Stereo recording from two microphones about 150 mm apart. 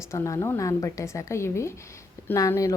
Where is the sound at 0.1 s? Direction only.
20° left (ahead or behind).